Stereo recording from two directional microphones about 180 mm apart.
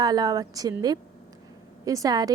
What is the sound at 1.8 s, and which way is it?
Speech, 20° right (ahead or behind).